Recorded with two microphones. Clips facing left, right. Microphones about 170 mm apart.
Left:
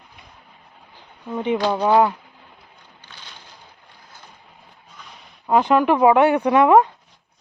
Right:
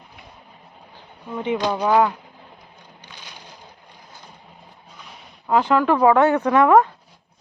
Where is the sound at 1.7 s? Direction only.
20° left (ahead or behind).